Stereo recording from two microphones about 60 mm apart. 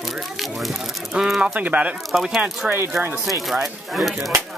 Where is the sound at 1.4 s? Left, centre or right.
Right.